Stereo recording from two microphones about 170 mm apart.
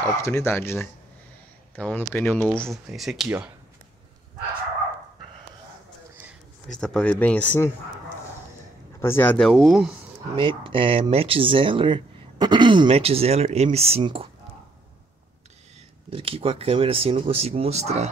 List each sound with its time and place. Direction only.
0.0 s speech: 15° left (ahead or behind); by 3.5 s 10° right (ahead or behind)
6.7 s speech: 5° left (ahead or behind)
9.0 s speech: 15° left (ahead or behind)
9.5 s speech: centre (ahead or behind)
10.3 s speech: 30° right (ahead or behind)
16.1 s speech: 35° right (ahead or behind)